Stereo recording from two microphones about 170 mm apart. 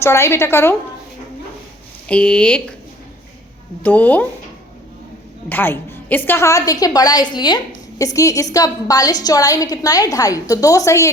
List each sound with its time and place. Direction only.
0.0 s a woman's voice: 15° left (ahead or behind)
2.0 s a woman's voice: 5° left (ahead or behind)
3.8 s a woman's voice: 10° left (ahead or behind)
5.5 s a woman's voice: 10° left (ahead or behind)